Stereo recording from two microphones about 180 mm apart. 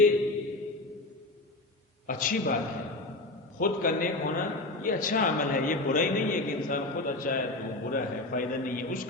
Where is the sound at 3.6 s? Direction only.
50° left (ahead or behind).